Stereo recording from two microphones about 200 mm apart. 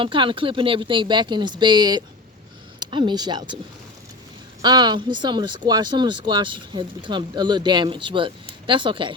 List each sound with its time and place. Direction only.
0.0 s speech: 25° right (ahead or behind)
4.6 s speech: 20° right (ahead or behind)